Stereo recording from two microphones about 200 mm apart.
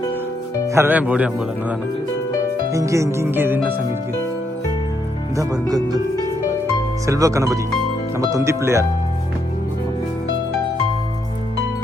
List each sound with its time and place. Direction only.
0.7 s speech: 10° right (ahead or behind)
2.7 s speech: 15° right (ahead or behind)
5.4 s speech: 20° right (ahead or behind)
7.1 s speech: 15° right (ahead or behind)